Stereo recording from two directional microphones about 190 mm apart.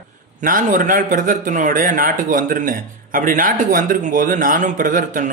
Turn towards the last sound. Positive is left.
turn(degrees=-45)  # may be behind; listen again after turning